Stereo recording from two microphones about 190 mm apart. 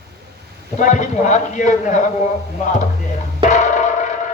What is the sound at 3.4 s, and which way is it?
Music, 40° left (ahead or behind).